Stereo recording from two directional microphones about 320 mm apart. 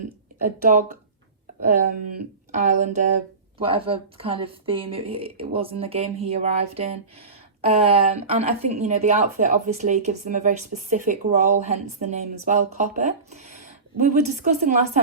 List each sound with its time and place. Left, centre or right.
0.7 s speech: right
2.6 s speech: right